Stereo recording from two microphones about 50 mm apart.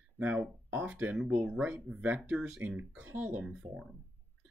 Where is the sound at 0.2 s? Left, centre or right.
Right.